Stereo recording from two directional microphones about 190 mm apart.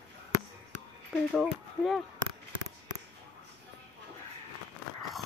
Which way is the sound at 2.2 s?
25° right (ahead or behind).